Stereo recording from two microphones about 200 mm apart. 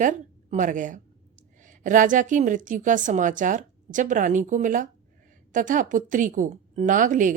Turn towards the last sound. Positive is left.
turn(degrees=-40)  # may be behind; listen again after turning